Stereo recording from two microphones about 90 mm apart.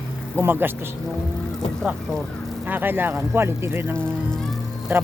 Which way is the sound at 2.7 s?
20° right (ahead or behind).